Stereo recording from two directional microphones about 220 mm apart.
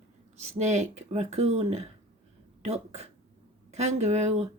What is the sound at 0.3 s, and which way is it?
Speech, 30° right (ahead or behind).